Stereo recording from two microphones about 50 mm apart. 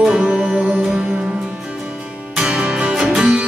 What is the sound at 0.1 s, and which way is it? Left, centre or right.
Music, centre.